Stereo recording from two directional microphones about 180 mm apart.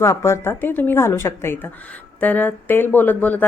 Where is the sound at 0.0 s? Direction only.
15° left (ahead or behind).